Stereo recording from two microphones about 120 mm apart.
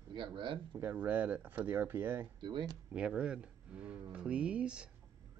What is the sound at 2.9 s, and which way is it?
Speech, 10° right (ahead or behind).